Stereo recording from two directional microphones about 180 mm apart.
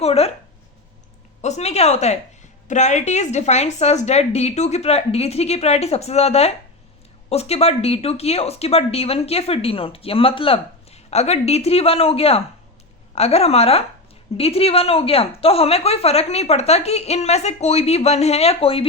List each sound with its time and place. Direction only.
0.0 s speech: 35° left (ahead or behind)
1.4 s speech: 40° left (ahead or behind)